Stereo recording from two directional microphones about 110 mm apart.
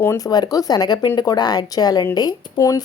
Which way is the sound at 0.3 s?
35° left (ahead or behind).